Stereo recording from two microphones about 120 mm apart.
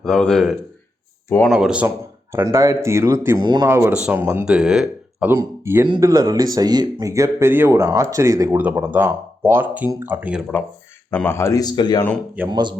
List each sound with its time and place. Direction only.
0.0 s speech: 5° left (ahead or behind)
2.3 s speech: 20° right (ahead or behind)
3.3 s speech: 35° right (ahead or behind)
3.7 s speech: 20° right (ahead or behind)
5.3 s speech: 20° right (ahead or behind)
8.5 s speech: 15° right (ahead or behind)
11.1 s speech: 15° left (ahead or behind)
11.6 s speech: 35° left (ahead or behind)
12.5 s speech: 35° right (ahead or behind)